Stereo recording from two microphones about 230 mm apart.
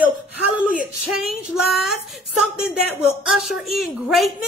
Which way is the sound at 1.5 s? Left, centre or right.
Centre.